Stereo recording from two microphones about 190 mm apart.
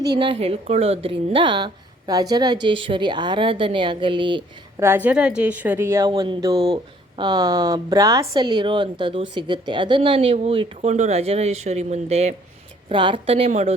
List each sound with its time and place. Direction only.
0.2 s a woman's voice: 30° right (ahead or behind)
4.8 s a woman's voice: 10° right (ahead or behind); by 13.7 s 35° right (ahead or behind)